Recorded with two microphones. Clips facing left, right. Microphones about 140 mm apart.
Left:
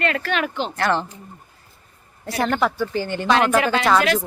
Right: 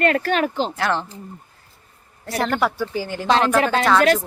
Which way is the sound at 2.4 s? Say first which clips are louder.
Left 1 dB; 5° right (ahead or behind).